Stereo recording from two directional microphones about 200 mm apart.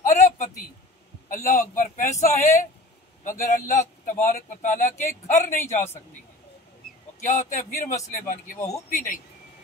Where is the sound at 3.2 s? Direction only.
40° left (ahead or behind).